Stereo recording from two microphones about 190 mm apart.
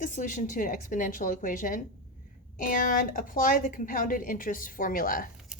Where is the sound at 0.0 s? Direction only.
40° left (ahead or behind).